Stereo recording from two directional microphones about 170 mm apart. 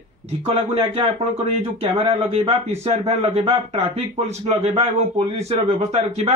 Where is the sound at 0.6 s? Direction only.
35° right (ahead or behind).